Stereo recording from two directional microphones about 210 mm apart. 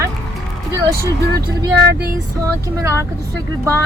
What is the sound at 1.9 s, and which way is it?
Female singing, 50° right (ahead or behind).